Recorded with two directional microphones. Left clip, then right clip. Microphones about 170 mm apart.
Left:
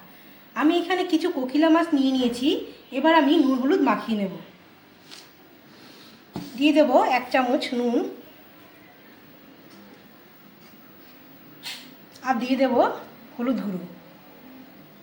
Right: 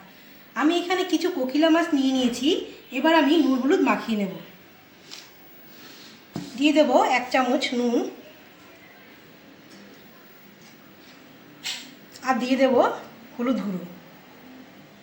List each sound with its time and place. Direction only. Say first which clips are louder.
0.5 s a woman's voice: left 1 dB; 10° left (ahead or behind)
6.6 s a woman's voice: even; centre (ahead or behind)
12.2 s a woman's voice: right 1 dB; 10° right (ahead or behind)